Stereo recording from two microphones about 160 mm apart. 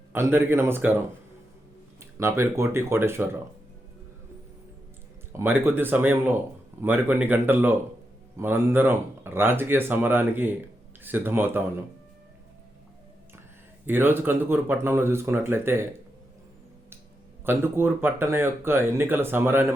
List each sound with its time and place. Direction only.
0.1 s speech: 15° right (ahead or behind)
2.0 s speech: 15° right (ahead or behind)
5.3 s speech: 15° right (ahead or behind)
13.8 s speech: 15° right (ahead or behind)
17.4 s speech: 15° right (ahead or behind)